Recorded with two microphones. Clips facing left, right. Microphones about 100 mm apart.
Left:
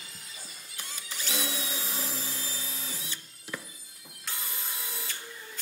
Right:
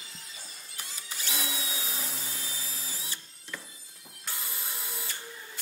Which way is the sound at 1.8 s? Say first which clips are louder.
Left 2 dB; centre (ahead or behind).